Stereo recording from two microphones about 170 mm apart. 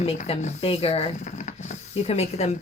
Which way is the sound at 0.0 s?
40° left (ahead or behind).